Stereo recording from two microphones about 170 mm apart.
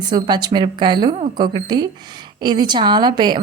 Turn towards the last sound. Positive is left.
turn(degrees=-25)  # may be behind; listen again after turning